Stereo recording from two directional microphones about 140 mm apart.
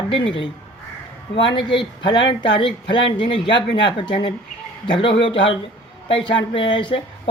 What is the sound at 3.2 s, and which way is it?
Speech, 35° left (ahead or behind).